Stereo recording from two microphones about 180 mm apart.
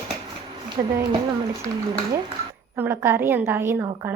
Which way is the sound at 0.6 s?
25° right (ahead or behind).